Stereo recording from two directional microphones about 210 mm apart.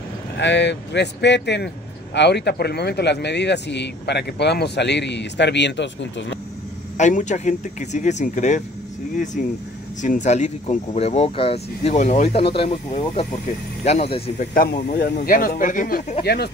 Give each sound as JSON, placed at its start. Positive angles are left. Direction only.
{"t": 0.4, "sound": "speech", "side_deg": 55}
{"t": 7.0, "sound": "speech", "side_deg": 35}
{"t": 14.5, "sound": "speech", "side_deg": 45}